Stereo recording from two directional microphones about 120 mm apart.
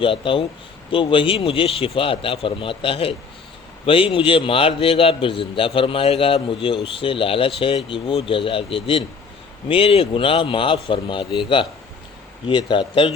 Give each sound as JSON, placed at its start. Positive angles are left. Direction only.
{"t": 0.0, "sound": "a man's voice", "side_deg": 45}